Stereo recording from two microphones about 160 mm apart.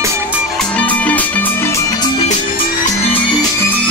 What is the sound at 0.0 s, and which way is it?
Music, 15° right (ahead or behind).